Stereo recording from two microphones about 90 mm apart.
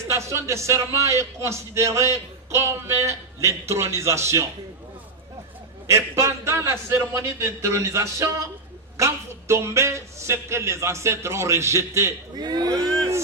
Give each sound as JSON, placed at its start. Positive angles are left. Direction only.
{"t": 0.1, "sound": "speech", "side_deg": -30}
{"t": 5.9, "sound": "speech", "side_deg": -30}
{"t": 12.4, "sound": "speech", "side_deg": -50}